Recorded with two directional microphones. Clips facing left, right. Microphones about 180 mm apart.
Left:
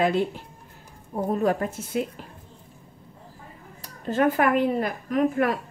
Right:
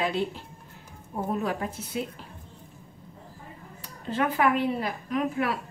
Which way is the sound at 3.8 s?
45° left (ahead or behind).